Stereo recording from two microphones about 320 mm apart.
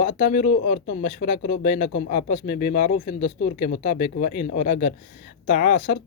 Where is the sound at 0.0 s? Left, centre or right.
Left.